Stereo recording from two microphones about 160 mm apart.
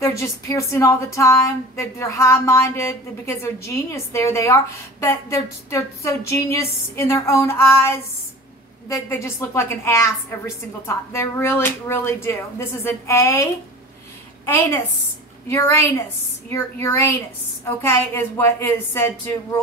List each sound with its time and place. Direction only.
0.0 s a woman's voice: 20° left (ahead or behind)